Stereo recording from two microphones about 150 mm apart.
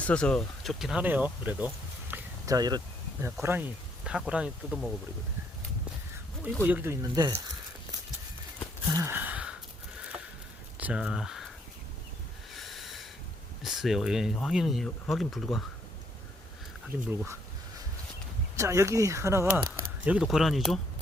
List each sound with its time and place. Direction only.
0.0 s speech: 5° left (ahead or behind); by 2.6 s 10° right (ahead or behind)
2.6 s a sound: 25° right (ahead or behind)
3.2 s speech: 15° right (ahead or behind)
6.6 s speech: 15° right (ahead or behind)
8.9 s a sound: 20° right (ahead or behind)
10.8 s speech: 10° right (ahead or behind)
12.5 s snort: centre (ahead or behind)
13.6 s speech: centre (ahead or behind)
18.5 s speech: 20° right (ahead or behind)
19.7 s speech: 5° right (ahead or behind)